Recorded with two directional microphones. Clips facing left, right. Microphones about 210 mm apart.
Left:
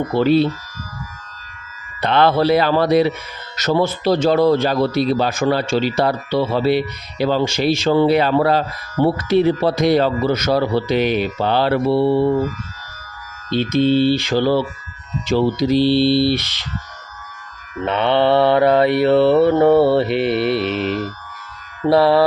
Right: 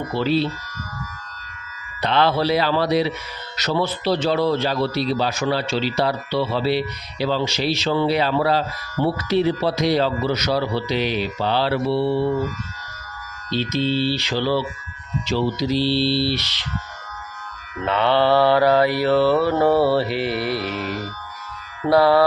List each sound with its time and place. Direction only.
0.1 s speech: 50° left (ahead or behind)
2.0 s speech: 50° left (ahead or behind)
13.5 s speech: 55° left (ahead or behind)
17.8 s mantra: 20° left (ahead or behind)